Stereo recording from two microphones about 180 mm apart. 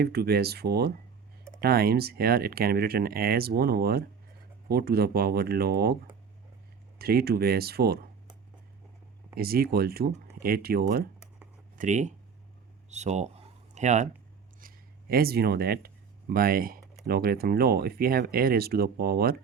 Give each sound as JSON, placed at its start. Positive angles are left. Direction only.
{"t": 0.0, "sound": "speech", "side_deg": -60}
{"t": 7.0, "sound": "speech", "side_deg": -60}
{"t": 9.3, "sound": "speech", "side_deg": -55}
{"t": 11.8, "sound": "speech", "side_deg": -40}
{"t": 12.9, "sound": "a sound", "side_deg": -40}
{"t": 14.6, "sound": "a sound", "side_deg": -50}
{"t": 15.1, "sound": "speech", "side_deg": -60}